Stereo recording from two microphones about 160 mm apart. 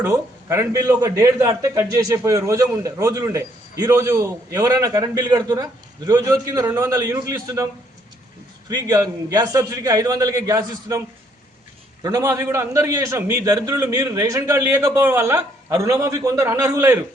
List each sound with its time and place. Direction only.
0.0 s a man's voice: 15° right (ahead or behind)
8.7 s a man's voice: 25° right (ahead or behind)
12.0 s a man's voice: 20° right (ahead or behind)